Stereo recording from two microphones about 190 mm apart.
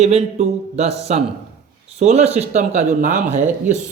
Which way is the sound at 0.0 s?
35° right (ahead or behind).